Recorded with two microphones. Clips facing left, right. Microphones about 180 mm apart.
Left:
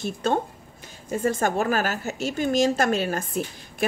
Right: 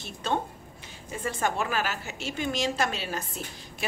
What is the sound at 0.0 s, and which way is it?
A woman's voice, 45° left (ahead or behind).